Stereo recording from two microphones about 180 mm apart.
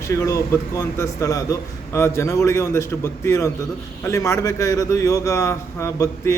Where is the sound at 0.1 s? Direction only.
15° left (ahead or behind).